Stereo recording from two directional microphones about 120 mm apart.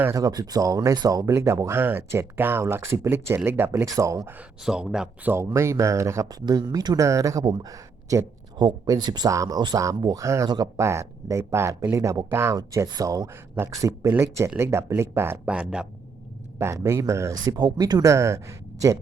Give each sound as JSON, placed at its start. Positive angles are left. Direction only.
{"t": 0.0, "sound": "speech", "side_deg": -25}
{"t": 4.6, "sound": "a man's voice", "side_deg": -5}
{"t": 5.5, "sound": "speech", "side_deg": -25}
{"t": 15.4, "sound": "speech", "side_deg": -10}
{"t": 16.6, "sound": "speech", "side_deg": -25}